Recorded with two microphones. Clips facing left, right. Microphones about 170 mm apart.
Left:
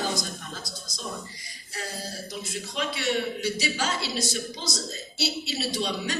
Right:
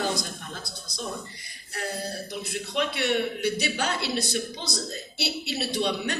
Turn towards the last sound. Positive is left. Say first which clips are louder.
# right 2 dB
turn(degrees=-60)  # may be behind; listen again after turning